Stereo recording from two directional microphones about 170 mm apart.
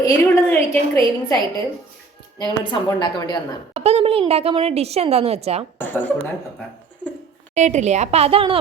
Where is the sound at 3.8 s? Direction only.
35° right (ahead or behind).